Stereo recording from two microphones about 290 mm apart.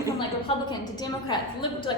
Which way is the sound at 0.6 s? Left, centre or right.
Centre.